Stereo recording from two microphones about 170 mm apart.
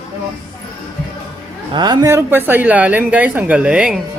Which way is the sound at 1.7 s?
25° right (ahead or behind).